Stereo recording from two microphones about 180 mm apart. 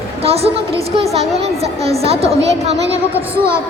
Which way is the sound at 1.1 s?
35° right (ahead or behind).